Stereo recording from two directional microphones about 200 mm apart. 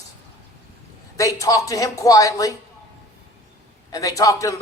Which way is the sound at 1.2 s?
15° left (ahead or behind).